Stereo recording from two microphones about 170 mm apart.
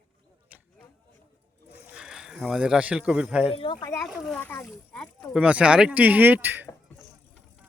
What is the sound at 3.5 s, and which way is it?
Speech, 30° left (ahead or behind).